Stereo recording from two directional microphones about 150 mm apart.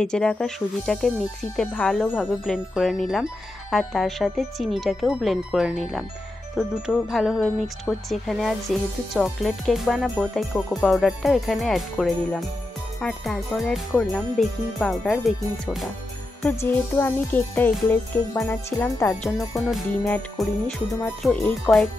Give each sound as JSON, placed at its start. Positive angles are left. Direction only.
{"t": 0.0, "sound": "speech", "side_deg": 5}
{"t": 16.5, "sound": "music", "side_deg": 15}
{"t": 19.7, "sound": "speech", "side_deg": 5}